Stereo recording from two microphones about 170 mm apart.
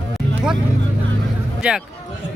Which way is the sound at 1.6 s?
5° right (ahead or behind).